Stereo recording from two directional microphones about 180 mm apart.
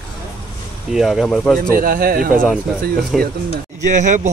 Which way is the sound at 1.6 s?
50° right (ahead or behind).